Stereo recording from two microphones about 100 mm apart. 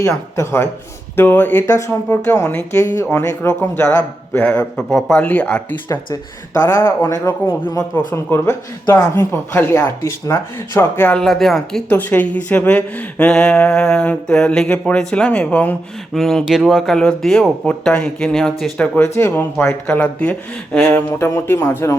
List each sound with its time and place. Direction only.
0.3 s a woman's voice: 25° left (ahead or behind)
6.7 s speech: 25° left (ahead or behind)
11.2 s speech: 5° left (ahead or behind)
11.9 s a woman's voice: 15° left (ahead or behind)
16.1 s speech: centre (ahead or behind)
19.0 s a woman's voice: 25° left (ahead or behind)